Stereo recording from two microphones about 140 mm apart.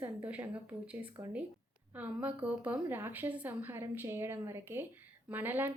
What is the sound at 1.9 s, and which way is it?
A woman's voice, 10° right (ahead or behind).